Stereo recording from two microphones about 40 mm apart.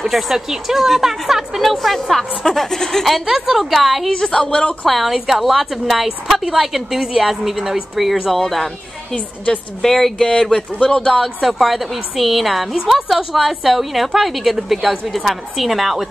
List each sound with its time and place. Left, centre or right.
0.0 s a woman's voice: centre
3.3 s a woman's voice: centre
4.1 s a woman's voice: centre
4.8 s a woman's voice: centre
8.3 s a woman's voice: centre
9.8 s a woman's voice: centre
11.1 s a woman's voice: centre